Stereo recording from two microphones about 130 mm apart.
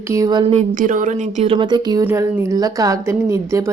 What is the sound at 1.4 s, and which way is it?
Speech, 40° right (ahead or behind).